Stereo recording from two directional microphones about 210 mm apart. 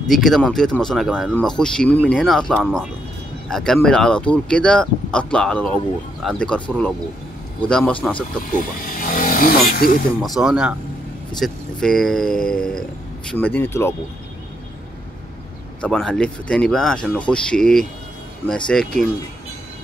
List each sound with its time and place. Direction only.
0.1 s speech: centre (ahead or behind)
8.5 s speech: 40° left (ahead or behind)
10.2 s speech: centre (ahead or behind)
15.8 s speech: 5° left (ahead or behind)